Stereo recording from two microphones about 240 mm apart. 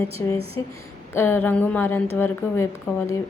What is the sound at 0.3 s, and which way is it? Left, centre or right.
Speech, right.